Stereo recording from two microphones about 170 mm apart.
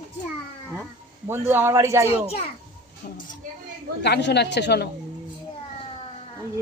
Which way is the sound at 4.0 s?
90° left.